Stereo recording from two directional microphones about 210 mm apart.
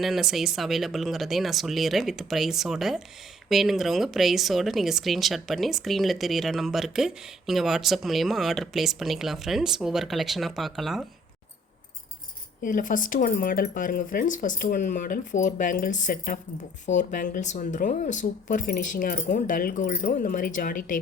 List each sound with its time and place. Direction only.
0.0 s speech: centre (ahead or behind)
12.6 s speech: 40° left (ahead or behind)